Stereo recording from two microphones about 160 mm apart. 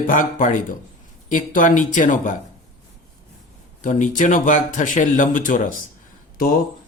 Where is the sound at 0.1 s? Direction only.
55° left (ahead or behind).